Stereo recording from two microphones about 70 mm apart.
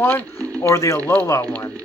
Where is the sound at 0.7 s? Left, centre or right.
Left.